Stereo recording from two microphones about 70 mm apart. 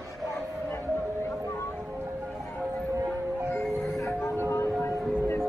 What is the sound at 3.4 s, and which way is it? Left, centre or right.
Music, left.